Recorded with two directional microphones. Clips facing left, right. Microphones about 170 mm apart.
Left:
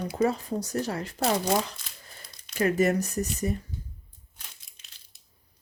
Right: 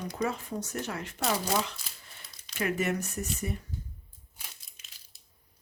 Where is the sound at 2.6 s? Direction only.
40° left (ahead or behind).